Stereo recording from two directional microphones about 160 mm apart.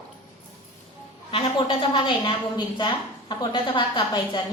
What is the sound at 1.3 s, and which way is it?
A woman's voice, 30° left (ahead or behind).